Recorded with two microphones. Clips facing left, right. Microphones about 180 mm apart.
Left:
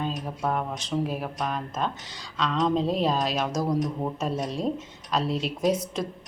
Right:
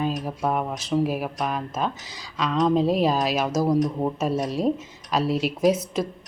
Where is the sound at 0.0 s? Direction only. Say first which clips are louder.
Right 4 dB; 10° right (ahead or behind).